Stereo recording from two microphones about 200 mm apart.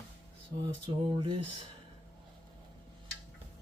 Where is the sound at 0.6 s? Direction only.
25° right (ahead or behind).